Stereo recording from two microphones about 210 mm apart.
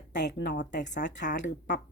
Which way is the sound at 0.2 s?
55° left (ahead or behind).